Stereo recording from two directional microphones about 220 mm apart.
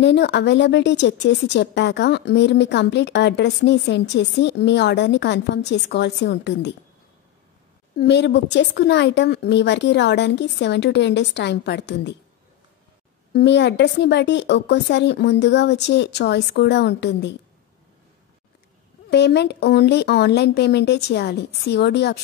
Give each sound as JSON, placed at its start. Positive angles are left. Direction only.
{"t": 0.0, "sound": "speech", "side_deg": 50}
{"t": 8.0, "sound": "speech", "side_deg": 50}
{"t": 13.3, "sound": "speech", "side_deg": 50}
{"t": 19.0, "sound": "speech", "side_deg": 50}